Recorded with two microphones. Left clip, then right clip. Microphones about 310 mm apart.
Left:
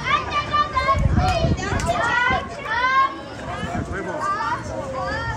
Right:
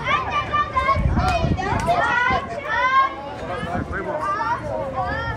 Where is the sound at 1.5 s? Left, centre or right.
Centre.